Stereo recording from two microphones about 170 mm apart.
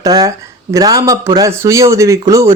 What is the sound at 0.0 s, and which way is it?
Speech, 20° right (ahead or behind).